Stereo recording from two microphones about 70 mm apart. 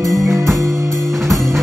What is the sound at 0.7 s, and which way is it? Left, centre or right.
Music, right.